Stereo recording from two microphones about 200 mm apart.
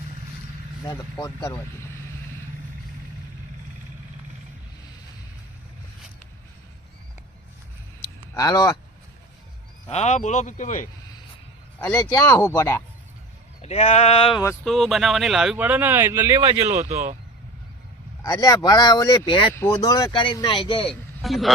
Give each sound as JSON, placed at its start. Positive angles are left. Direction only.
{"t": 1.2, "sound": "speech", "side_deg": 15}
{"t": 8.4, "sound": "speech", "side_deg": 20}
{"t": 9.9, "sound": "speech", "side_deg": 35}
{"t": 11.8, "sound": "speech", "side_deg": 15}
{"t": 13.6, "sound": "speech", "side_deg": 30}
{"t": 14.6, "sound": "speech", "side_deg": 0}
{"t": 16.5, "sound": "speech", "side_deg": -30}
{"t": 18.2, "sound": "speech", "side_deg": 15}
{"t": 21.2, "sound": "speech", "side_deg": 0}